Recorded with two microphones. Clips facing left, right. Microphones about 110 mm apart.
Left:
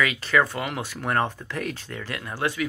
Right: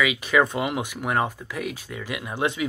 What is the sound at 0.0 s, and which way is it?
Speech, 10° right (ahead or behind).